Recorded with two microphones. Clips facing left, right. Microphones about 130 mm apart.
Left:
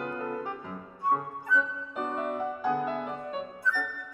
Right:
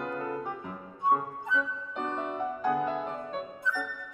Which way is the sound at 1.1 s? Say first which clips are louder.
Right 2 dB; 20° right (ahead or behind).